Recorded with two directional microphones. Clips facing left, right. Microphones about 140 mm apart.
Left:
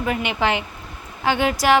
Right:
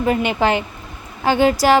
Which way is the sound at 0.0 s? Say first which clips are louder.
Right 5 dB; 40° right (ahead or behind).